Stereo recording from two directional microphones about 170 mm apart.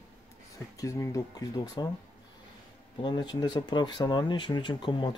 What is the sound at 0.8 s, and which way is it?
Speech, 20° left (ahead or behind).